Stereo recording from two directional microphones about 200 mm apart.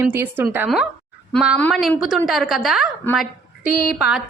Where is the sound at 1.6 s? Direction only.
5° left (ahead or behind).